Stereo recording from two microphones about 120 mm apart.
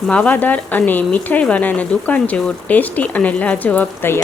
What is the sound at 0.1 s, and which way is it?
Speech, 10° left (ahead or behind).